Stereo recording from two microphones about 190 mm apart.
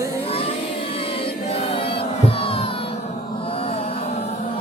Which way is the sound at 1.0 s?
30° left (ahead or behind).